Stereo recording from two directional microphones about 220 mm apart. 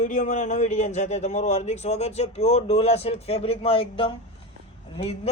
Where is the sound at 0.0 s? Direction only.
35° left (ahead or behind).